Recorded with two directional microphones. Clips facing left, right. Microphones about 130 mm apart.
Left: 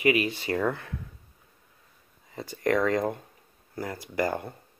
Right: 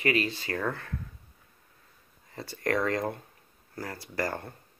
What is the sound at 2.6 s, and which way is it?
Speech, centre (ahead or behind).